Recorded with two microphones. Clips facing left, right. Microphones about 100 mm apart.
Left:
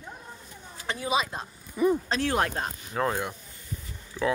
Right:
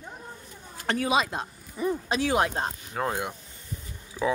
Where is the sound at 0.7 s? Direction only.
65° right (ahead or behind); by 1.4 s 85° right.